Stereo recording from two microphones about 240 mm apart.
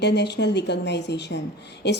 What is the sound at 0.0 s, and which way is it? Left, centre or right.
A woman's voice, left.